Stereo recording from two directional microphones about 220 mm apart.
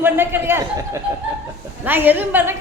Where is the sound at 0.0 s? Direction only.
10° right (ahead or behind).